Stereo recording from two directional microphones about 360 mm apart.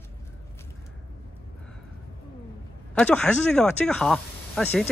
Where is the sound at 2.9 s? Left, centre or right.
Centre.